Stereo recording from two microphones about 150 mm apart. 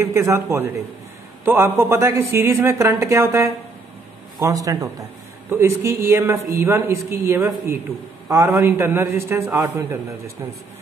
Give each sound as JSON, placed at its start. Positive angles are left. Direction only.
{"t": 0.0, "sound": "a man's voice", "side_deg": -15}